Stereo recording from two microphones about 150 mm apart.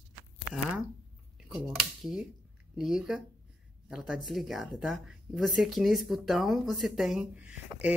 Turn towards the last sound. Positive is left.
turn(degrees=-10)  # may be behind; listen again after turning